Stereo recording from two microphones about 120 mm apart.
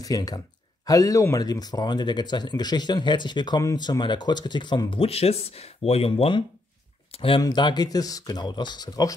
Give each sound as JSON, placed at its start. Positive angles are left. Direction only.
{"t": 0.0, "sound": "speech", "side_deg": 30}
{"t": 7.4, "sound": "speech", "side_deg": 35}